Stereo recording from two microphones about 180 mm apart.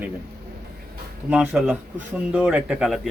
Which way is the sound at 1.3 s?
5° right (ahead or behind).